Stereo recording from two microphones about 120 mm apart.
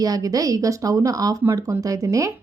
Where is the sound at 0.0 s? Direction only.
30° right (ahead or behind).